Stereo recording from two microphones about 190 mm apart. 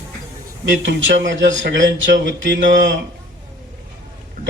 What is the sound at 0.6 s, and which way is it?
Speech, 75° right (ahead or behind).